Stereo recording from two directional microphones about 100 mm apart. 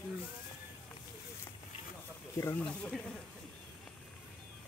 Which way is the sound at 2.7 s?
10° left (ahead or behind).